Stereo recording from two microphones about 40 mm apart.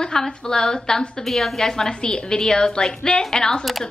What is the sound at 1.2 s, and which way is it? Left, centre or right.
A woman's voice, centre.